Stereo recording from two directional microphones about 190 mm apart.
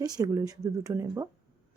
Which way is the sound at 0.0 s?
20° right (ahead or behind).